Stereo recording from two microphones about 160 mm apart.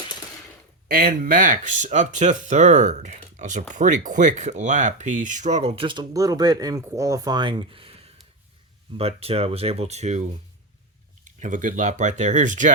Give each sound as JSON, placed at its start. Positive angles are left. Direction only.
{"t": 0.9, "sound": "speech", "side_deg": -65}
{"t": 11.3, "sound": "speech", "side_deg": -55}